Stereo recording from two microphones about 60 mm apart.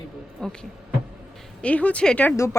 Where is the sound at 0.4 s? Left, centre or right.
Centre.